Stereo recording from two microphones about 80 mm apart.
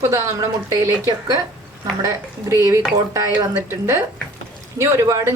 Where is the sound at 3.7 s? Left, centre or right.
Right.